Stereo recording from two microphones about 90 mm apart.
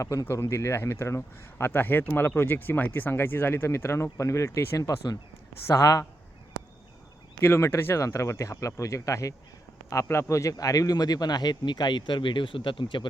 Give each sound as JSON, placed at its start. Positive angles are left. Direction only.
{"t": 0.0, "sound": "speech", "side_deg": 35}
{"t": 7.4, "sound": "a man's voice", "side_deg": 25}